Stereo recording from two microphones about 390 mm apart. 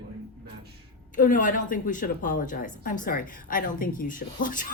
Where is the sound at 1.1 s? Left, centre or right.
Centre.